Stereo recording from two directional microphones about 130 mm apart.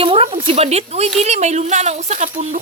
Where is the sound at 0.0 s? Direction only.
45° right (ahead or behind).